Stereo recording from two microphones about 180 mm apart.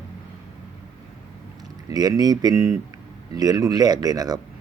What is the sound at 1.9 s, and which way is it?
Speech, 20° right (ahead or behind).